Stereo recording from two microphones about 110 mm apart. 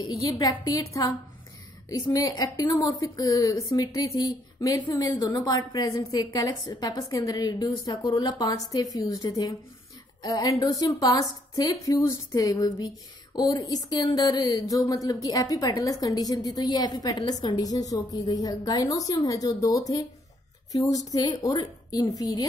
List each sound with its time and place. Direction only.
0.1 s a woman's voice: 35° left (ahead or behind)